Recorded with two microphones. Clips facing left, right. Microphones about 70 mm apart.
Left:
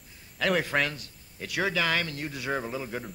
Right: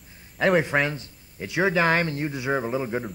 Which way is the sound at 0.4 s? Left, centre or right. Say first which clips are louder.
Right 5 dB; right.